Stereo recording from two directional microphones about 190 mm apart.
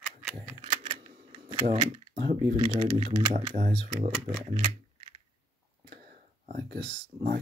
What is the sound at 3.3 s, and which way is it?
Speech, 45° right (ahead or behind).